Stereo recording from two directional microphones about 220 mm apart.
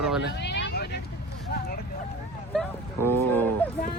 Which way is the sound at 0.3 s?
50° left (ahead or behind).